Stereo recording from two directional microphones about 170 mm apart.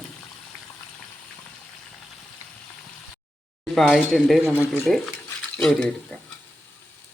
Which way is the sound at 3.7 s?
Centre (ahead or behind).